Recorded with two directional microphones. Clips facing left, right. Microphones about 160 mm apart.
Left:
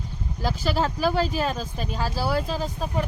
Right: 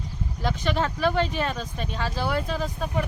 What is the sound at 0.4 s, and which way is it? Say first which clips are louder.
Speech: left 1 dB; 5° left (ahead or behind).